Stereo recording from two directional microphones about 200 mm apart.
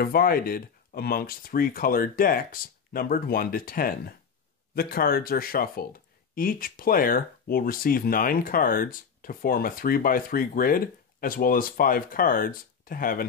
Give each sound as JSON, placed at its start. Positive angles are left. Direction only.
{"t": 0.0, "sound": "speech", "side_deg": 45}